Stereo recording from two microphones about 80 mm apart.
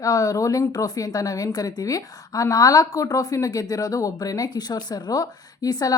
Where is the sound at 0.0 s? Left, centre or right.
Left.